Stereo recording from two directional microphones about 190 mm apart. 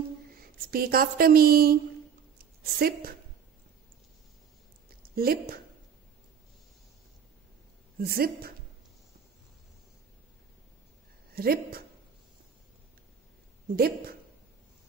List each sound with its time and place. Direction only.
0.7 s speech: 50° right (ahead or behind)
2.3 s a sound: 50° right (ahead or behind)
4.8 s a sound: 50° right (ahead or behind)
8.0 s speech: 50° right (ahead or behind)
11.3 s speech: 50° right (ahead or behind)
13.7 s speech: 50° right (ahead or behind)